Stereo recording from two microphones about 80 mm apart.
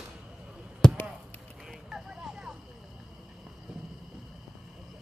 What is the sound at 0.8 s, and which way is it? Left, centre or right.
Chop, centre.